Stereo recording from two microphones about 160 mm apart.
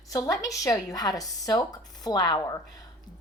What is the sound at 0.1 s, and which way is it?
A woman's voice, 20° left (ahead or behind).